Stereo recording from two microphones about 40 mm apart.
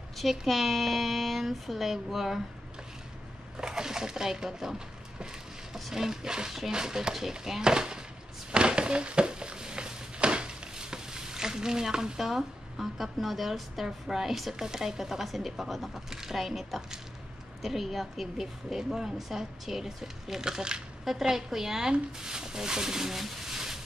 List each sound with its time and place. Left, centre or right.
0.2 s speech: centre
3.5 s a woman's voice: centre
8.5 s a sound: right
12.2 s a woman's voice: centre